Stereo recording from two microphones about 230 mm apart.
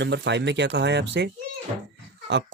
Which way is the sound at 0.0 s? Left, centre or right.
Right.